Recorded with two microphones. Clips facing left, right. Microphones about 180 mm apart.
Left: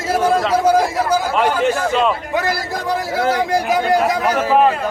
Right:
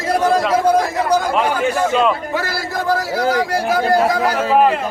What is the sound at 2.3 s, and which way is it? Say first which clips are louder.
A man's voice: left 1 dB; 20° left (ahead or behind).